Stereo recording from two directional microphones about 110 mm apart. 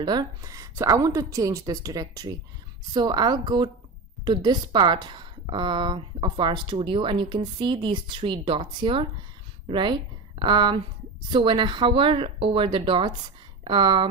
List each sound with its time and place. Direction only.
0.0 s a woman's voice: 40° right (ahead or behind)